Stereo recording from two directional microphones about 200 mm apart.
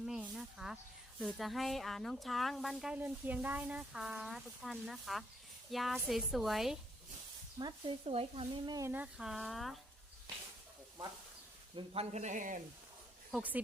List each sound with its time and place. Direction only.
0.0 s snake: 5° right (ahead or behind)
1.2 s speech: centre (ahead or behind)
7.6 s speech: 25° right (ahead or behind); by 9.7 s centre (ahead or behind)
11.8 s speech: 30° right (ahead or behind)
13.3 s speech: 5° right (ahead or behind)